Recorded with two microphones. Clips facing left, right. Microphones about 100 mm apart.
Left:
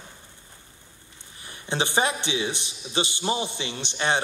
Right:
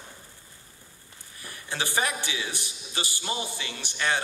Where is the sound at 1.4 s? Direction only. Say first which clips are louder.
Left 5 dB; 25° left (ahead or behind).